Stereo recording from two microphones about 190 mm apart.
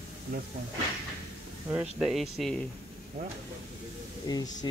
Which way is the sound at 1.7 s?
5° right (ahead or behind).